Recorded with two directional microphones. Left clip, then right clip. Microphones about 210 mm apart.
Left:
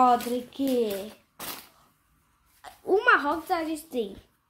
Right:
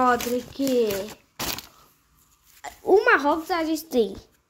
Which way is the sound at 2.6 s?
25° right (ahead or behind).